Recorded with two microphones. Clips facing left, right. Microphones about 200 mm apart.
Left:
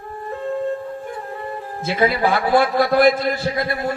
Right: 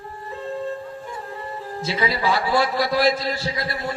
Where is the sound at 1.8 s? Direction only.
55° left (ahead or behind).